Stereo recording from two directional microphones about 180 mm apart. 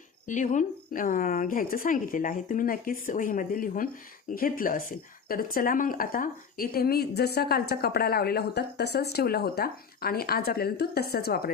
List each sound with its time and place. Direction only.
0.3 s a woman's voice: 45° left (ahead or behind)